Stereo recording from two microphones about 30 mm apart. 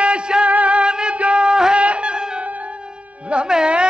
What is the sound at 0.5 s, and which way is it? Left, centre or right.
Music, right.